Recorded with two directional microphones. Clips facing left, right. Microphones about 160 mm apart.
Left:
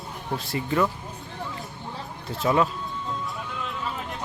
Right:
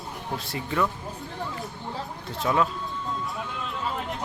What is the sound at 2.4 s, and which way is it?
Speech, 5° left (ahead or behind).